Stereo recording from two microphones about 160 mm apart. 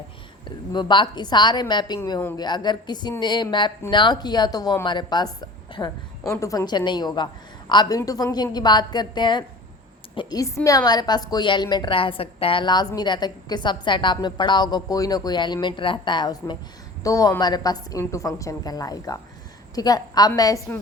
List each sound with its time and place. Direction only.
0.4 s speech: 30° left (ahead or behind)